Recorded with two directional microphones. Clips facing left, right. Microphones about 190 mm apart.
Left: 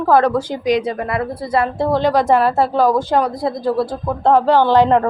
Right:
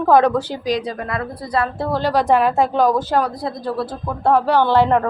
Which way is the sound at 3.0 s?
5° right (ahead or behind).